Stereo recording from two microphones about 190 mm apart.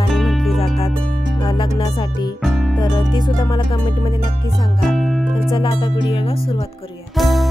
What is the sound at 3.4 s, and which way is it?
Music, 25° left (ahead or behind).